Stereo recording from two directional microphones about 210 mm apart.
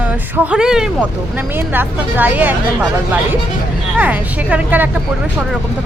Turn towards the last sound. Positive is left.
turn(degrees=-10)  # may be behind; listen again after turning